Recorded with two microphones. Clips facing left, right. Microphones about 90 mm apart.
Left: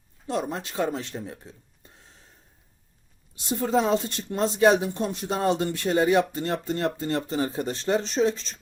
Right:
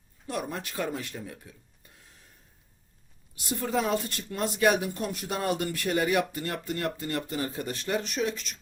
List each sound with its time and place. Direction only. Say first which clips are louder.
0.3 s speech: left 5 dB; 25° left (ahead or behind)
3.3 s speech: left 5 dB; 25° left (ahead or behind)